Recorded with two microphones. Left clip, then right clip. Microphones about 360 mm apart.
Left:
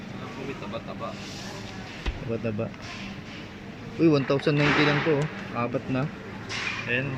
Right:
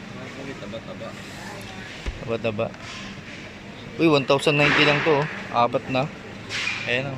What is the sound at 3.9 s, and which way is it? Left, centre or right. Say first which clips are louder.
Speech: right 4 dB; centre.